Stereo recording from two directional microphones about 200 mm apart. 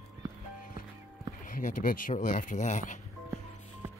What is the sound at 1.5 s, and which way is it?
Speech, 40° left (ahead or behind).